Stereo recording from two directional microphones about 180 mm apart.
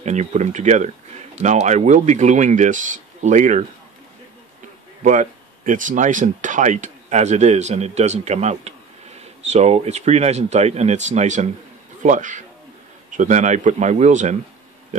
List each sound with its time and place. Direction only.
0.0 s speech: 40° right (ahead or behind)
5.0 s speech: 45° right (ahead or behind)